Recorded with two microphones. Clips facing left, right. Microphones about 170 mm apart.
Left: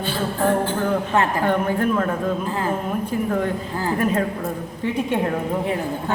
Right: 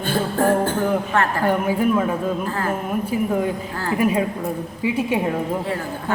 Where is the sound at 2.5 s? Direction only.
15° left (ahead or behind).